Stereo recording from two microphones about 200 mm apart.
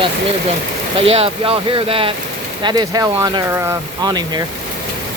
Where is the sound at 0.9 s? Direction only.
30° right (ahead or behind).